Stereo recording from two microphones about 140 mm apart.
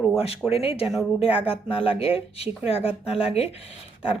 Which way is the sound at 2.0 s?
45° left (ahead or behind).